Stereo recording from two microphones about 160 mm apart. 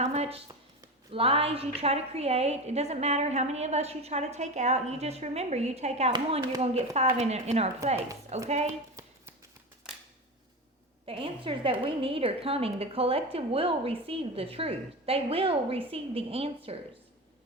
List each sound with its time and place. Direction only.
0.0 s a sound: 40° right (ahead or behind)
1.1 s a woman's voice: 35° right (ahead or behind)
11.0 s a woman's voice: 35° right (ahead or behind)